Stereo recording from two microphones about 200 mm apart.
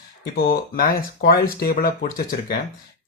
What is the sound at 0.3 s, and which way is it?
Speech, 45° left (ahead or behind).